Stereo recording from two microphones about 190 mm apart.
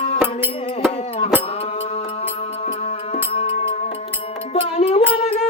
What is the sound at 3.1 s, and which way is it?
Music, 30° left (ahead or behind).